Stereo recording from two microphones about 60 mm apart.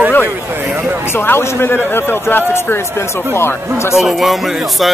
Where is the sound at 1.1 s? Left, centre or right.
Left.